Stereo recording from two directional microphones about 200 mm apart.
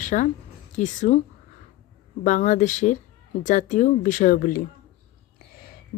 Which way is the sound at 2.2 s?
40° left (ahead or behind).